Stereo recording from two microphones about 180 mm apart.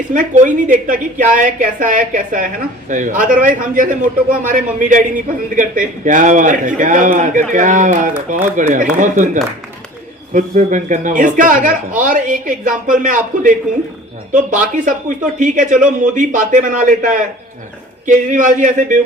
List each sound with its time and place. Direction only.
0.1 s a man's voice: 45° right (ahead or behind)